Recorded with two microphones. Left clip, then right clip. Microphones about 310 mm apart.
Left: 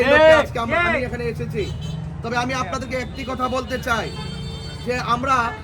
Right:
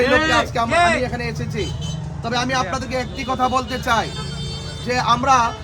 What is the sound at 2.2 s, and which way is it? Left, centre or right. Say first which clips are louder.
A man's voice: right 2 dB; centre.